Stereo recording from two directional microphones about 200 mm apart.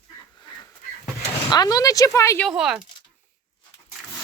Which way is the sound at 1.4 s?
20° left (ahead or behind).